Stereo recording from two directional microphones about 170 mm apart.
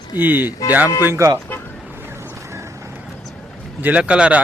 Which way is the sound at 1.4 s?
15° left (ahead or behind).